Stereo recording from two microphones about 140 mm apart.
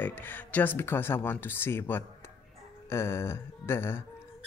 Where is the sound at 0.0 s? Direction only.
15° left (ahead or behind).